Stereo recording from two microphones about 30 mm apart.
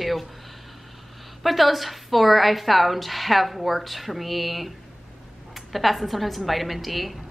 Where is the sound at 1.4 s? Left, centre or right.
Centre.